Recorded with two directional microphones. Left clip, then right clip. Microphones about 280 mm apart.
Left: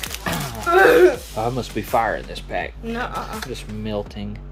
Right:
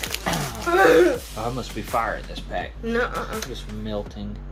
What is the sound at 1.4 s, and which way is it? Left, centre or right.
Speech, left.